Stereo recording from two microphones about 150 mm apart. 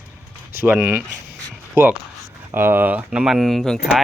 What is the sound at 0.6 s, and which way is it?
Speech, 10° right (ahead or behind).